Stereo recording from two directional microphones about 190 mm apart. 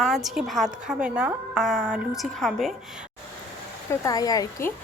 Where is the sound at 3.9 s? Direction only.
15° left (ahead or behind).